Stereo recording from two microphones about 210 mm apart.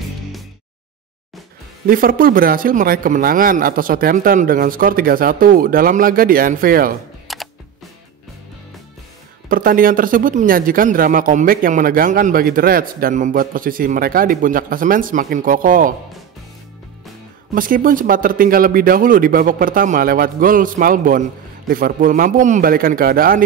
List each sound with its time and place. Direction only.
1.9 s a man's voice: 45° right (ahead or behind)
7.3 s camera: centre (ahead or behind)
9.5 s a man's voice: 40° right (ahead or behind)
17.6 s a man's voice: 40° right (ahead or behind)